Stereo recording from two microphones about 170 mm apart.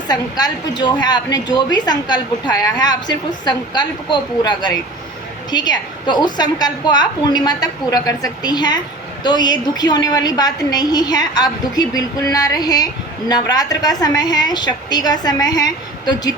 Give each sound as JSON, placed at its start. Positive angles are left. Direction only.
{"t": 0.1, "sound": "a woman's voice", "side_deg": 25}